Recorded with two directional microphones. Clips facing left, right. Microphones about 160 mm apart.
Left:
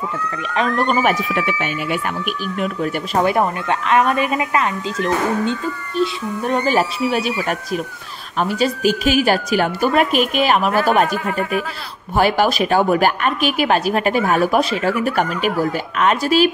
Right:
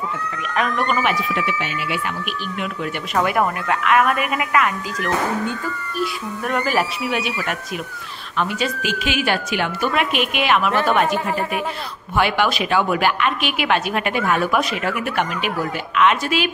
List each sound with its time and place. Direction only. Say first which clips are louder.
0.6 s speech: left 3 dB; 30° left (ahead or behind)
1.3 s speech: left 3 dB; 50° left (ahead or behind)
2.6 s speech: left 6 dB; 35° left (ahead or behind)
12.2 s speech: left 3 dB; 40° left (ahead or behind)